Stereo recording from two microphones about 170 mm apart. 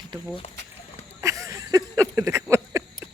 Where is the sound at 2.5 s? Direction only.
15° right (ahead or behind).